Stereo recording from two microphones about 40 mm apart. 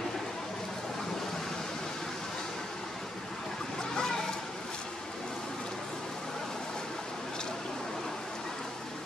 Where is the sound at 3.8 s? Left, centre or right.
Centre.